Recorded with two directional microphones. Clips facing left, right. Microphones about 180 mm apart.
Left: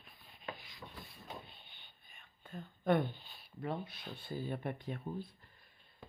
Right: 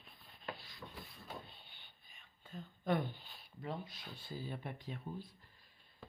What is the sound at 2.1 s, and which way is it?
Whispering, 55° left (ahead or behind).